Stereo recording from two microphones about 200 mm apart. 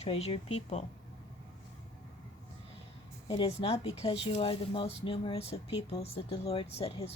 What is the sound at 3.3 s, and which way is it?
A woman's voice, 30° left (ahead or behind).